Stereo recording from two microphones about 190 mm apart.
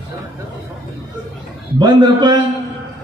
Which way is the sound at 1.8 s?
20° right (ahead or behind).